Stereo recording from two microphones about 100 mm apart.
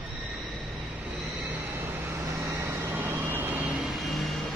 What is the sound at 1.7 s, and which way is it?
Vehicle, 30° right (ahead or behind).